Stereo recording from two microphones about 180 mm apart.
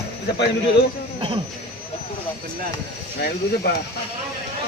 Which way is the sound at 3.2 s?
65° left (ahead or behind).